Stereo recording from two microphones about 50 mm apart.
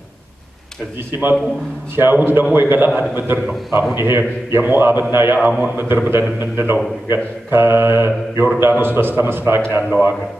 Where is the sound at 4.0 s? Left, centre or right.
Right.